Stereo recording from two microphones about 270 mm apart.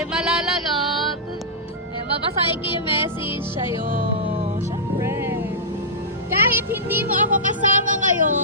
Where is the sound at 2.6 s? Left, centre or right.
Centre.